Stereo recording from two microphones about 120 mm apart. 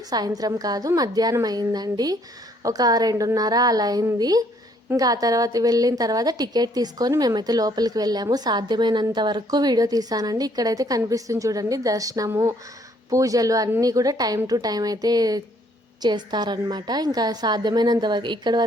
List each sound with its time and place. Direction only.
0.1 s a woman's voice: 30° right (ahead or behind)